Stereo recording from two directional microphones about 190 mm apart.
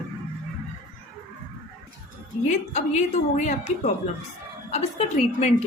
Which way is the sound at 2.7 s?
35° left (ahead or behind).